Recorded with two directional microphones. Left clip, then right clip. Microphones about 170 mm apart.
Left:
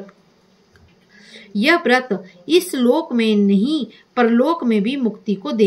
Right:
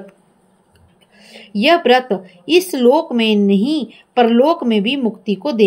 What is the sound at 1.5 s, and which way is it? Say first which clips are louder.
A woman's voice: right 4 dB; 25° right (ahead or behind).